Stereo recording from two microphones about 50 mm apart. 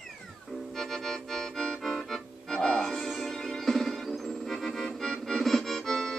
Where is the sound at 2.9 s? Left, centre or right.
Centre.